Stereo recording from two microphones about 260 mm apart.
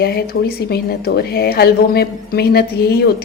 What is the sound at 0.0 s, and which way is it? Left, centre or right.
A woman's voice, left.